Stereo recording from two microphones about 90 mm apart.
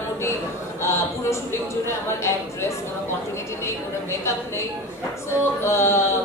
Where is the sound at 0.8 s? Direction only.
30° left (ahead or behind).